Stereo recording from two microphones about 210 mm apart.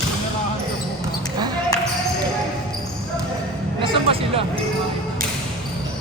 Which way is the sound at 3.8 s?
25° right (ahead or behind).